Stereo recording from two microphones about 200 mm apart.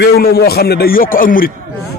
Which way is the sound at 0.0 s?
50° left (ahead or behind).